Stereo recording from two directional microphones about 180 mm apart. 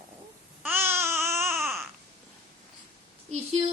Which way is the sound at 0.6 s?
10° right (ahead or behind).